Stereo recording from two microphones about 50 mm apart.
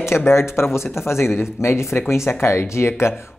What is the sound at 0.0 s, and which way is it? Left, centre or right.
Speech, left.